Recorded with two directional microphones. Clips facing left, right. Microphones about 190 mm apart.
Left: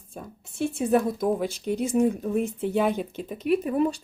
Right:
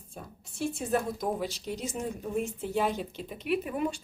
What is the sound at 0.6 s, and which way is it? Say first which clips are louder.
A woman's voice: left 7 dB; 60° left (ahead or behind).